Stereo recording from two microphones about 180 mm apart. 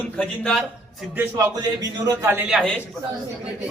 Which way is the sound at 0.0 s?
5° left (ahead or behind).